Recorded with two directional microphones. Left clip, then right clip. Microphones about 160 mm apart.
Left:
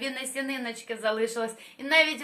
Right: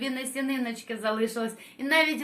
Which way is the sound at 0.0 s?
25° left (ahead or behind).